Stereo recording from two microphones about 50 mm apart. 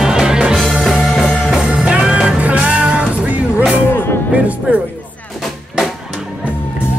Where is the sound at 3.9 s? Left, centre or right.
Left.